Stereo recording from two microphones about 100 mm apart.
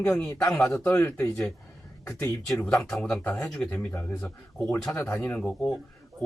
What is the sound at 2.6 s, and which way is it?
Speech, 5° left (ahead or behind).